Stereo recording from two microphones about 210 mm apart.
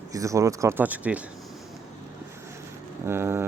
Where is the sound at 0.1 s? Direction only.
15° right (ahead or behind).